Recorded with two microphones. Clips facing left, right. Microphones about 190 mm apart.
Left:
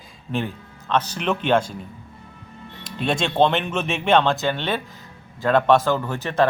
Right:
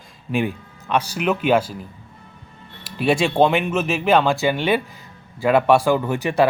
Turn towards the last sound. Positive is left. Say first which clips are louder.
# right 4 dB
turn(degrees=-15)  # may be behind; listen again after turning